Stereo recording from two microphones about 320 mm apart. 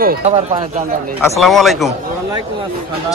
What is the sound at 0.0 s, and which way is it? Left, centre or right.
Speech, right.